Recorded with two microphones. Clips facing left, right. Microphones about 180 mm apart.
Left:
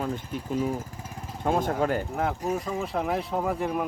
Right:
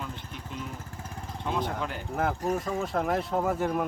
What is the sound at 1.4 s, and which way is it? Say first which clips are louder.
Speech: left 6 dB; 45° left (ahead or behind).